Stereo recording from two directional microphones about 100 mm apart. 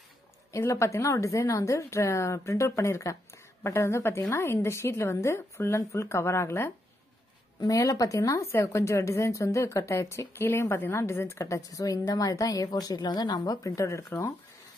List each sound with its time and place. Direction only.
0.5 s a woman's voice: 30° left (ahead or behind)